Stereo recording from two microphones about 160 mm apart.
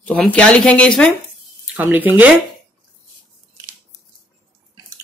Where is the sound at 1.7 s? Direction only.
10° right (ahead or behind).